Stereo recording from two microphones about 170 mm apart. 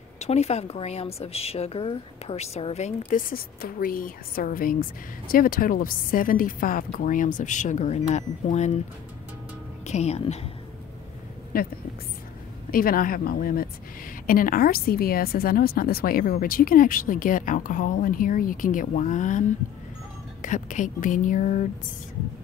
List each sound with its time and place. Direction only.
0.2 s a woman's voice: 40° left (ahead or behind)
9.8 s a woman's voice: 40° left (ahead or behind)
11.5 s a woman's voice: 60° left (ahead or behind)
12.7 s a woman's voice: 55° left (ahead or behind)
20.4 s a woman's voice: 50° left (ahead or behind)